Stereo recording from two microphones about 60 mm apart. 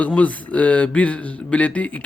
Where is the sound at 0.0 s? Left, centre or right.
Left.